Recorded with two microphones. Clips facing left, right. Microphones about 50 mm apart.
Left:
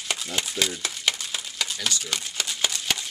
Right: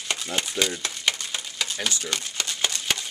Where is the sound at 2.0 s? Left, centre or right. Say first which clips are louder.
Right 1 dB; centre.